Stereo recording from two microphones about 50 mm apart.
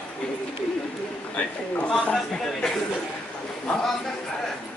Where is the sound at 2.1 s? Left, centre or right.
Centre.